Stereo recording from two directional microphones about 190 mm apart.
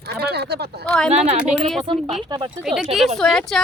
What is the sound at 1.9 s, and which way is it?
Speech, 25° right (ahead or behind).